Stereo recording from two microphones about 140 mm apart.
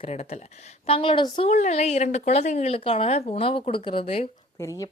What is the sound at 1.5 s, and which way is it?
Speech, 55° left (ahead or behind).